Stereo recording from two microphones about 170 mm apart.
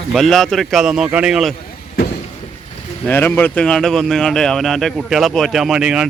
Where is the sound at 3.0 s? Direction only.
10° left (ahead or behind).